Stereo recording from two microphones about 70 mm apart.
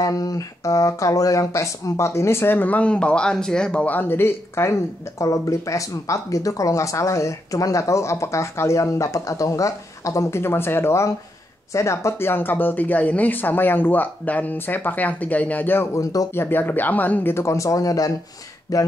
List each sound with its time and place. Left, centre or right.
0.0 s speech: left
5.2 s speech: left
15.9 s speech: left
16.3 s speech: left